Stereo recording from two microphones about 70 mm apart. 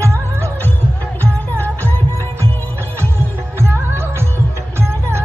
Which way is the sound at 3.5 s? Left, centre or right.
Right.